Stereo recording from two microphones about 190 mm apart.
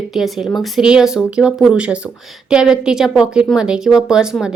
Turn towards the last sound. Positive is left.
turn(degrees=-5)  # may be behind; listen again after turning